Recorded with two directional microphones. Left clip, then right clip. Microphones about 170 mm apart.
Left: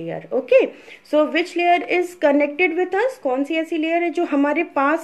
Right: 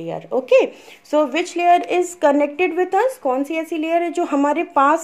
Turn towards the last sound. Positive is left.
turn(degrees=-20)  # may be behind; listen again after turning